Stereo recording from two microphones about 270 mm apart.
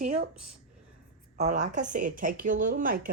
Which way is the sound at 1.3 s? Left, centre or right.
Right.